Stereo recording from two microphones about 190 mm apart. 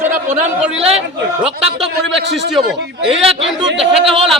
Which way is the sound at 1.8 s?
Centre (ahead or behind).